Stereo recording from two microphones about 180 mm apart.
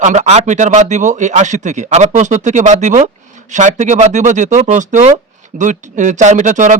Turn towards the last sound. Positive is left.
turn(degrees=-45)  # may be behind; listen again after turning